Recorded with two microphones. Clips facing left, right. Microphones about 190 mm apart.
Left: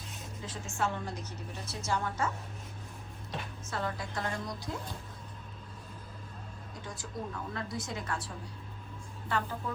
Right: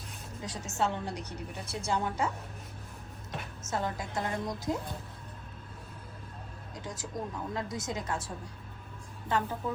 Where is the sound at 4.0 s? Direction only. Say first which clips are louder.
Right 2 dB; 20° right (ahead or behind).